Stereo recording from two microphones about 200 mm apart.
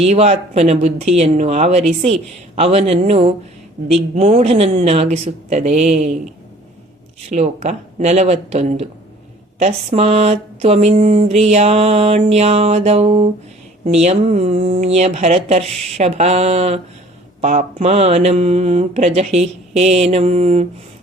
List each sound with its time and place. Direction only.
0.0 s mantra: 30° right (ahead or behind)
7.3 s mantra: 35° right (ahead or behind)